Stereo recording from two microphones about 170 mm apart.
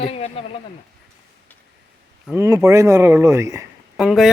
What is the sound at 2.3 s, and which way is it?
Speech, 15° right (ahead or behind).